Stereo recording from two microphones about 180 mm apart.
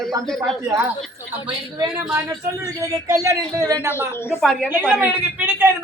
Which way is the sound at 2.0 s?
15° right (ahead or behind).